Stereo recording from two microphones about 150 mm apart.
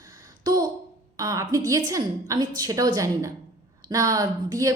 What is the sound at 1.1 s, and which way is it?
A woman's voice, 25° right (ahead or behind).